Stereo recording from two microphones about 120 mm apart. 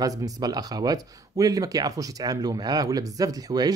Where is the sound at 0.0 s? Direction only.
30° right (ahead or behind).